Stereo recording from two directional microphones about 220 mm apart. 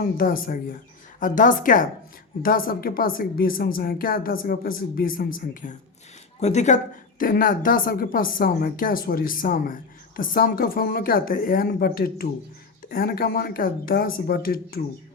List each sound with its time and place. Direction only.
0.0 s speech: 40° left (ahead or behind)